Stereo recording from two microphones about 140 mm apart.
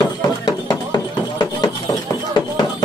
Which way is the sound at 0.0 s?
30° left (ahead or behind).